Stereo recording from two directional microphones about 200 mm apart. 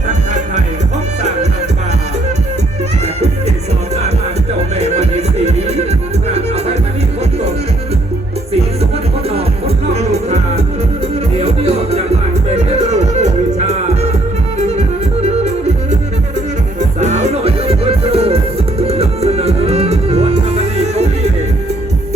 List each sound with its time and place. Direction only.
4.8 s music: 35° right (ahead or behind)
9.3 s music: 30° right (ahead or behind)
17.0 s music: 35° right (ahead or behind)